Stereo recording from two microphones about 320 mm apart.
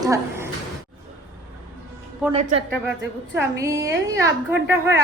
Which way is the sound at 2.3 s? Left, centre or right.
Centre.